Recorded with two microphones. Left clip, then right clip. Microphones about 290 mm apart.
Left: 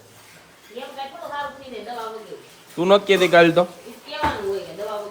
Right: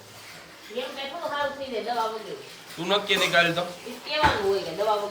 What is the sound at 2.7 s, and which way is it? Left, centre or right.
Speech, centre.